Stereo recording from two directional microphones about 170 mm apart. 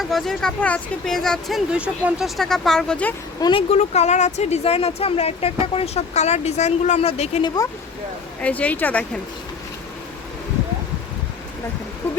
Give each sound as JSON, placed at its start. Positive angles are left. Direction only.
{"t": 0.0, "sound": "speech", "side_deg": 0}
{"t": 3.4, "sound": "speech", "side_deg": 35}
{"t": 7.4, "sound": "speech", "side_deg": 20}
{"t": 8.4, "sound": "a woman's voice", "side_deg": 10}